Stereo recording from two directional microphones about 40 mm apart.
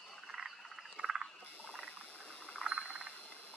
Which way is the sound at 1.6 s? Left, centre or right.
Right.